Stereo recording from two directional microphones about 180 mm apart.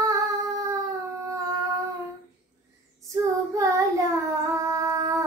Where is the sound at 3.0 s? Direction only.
20° right (ahead or behind).